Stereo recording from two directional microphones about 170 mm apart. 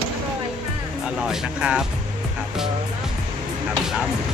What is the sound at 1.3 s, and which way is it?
Speech, 5° right (ahead or behind).